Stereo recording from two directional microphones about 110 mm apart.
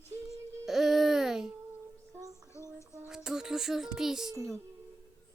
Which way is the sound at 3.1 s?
5° right (ahead or behind).